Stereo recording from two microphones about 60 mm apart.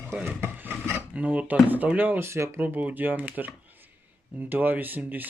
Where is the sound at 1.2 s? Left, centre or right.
Right.